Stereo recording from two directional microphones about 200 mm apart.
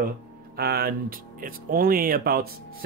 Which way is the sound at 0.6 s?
50° right (ahead or behind).